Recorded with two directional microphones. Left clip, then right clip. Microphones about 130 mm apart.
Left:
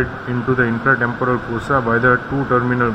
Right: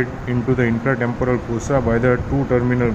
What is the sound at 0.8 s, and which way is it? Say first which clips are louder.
Speech: left 4 dB; 40° right (ahead or behind).